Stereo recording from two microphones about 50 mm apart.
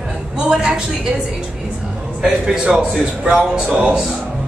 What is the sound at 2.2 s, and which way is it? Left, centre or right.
A man's voice, centre.